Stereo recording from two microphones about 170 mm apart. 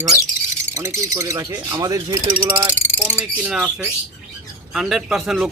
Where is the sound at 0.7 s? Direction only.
15° right (ahead or behind).